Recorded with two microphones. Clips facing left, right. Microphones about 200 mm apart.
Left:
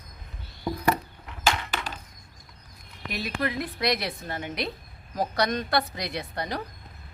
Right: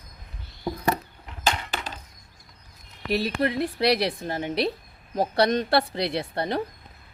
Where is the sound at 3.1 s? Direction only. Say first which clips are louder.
Right 6 dB; 30° right (ahead or behind).